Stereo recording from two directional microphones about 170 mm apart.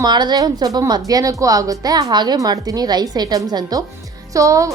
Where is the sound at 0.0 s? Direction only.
25° right (ahead or behind).